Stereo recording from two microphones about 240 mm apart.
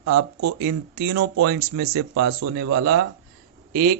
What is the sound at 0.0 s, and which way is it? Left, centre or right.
Speech, right.